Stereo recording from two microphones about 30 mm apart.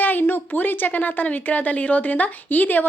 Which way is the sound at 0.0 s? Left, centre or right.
Left.